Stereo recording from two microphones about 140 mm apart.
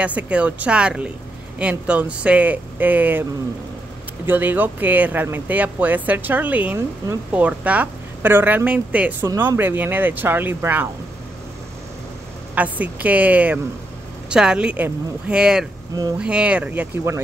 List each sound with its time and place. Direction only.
0.0 s speech: 10° right (ahead or behind)
4.3 s speech: 15° right (ahead or behind)
12.5 s speech: 10° right (ahead or behind)
15.9 s speech: 25° right (ahead or behind)
16.2 s speech: 5° right (ahead or behind)